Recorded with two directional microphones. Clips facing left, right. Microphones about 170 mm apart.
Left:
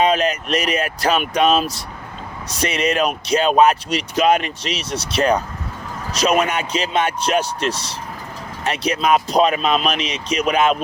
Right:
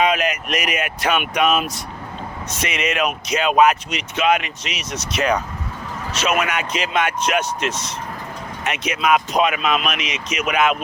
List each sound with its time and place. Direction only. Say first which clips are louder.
0.0 s speech: left 2 dB; 30° left (ahead or behind)